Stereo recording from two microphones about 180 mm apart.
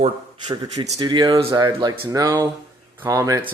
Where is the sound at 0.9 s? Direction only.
20° right (ahead or behind).